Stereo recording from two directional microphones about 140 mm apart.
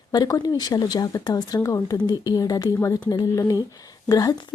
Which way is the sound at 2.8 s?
15° left (ahead or behind).